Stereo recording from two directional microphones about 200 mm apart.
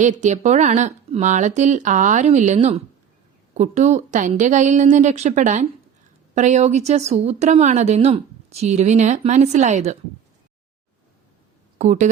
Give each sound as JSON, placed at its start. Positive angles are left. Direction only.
{"t": 0.0, "sound": "speech", "side_deg": -35}
{"t": 11.8, "sound": "speech", "side_deg": -35}